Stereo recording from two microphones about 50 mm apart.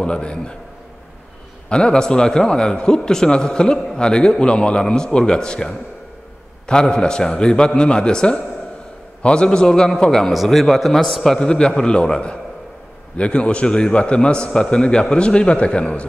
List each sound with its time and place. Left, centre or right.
0.0 s a man's voice: centre
1.7 s a man's voice: centre
10.3 s a man's voice: centre
11.3 s a man's voice: centre